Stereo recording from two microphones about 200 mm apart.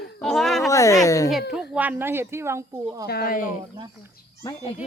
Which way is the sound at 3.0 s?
50° left (ahead or behind).